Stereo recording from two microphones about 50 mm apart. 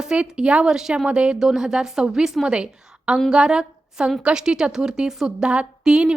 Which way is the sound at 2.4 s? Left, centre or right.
Centre.